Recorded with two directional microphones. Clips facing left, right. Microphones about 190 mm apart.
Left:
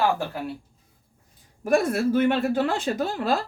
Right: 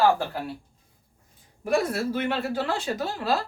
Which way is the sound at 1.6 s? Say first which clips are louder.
Left 3 dB; 50° left (ahead or behind).